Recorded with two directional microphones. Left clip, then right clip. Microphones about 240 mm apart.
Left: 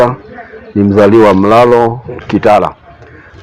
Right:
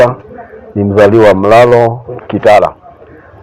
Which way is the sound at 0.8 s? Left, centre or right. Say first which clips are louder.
Even; left.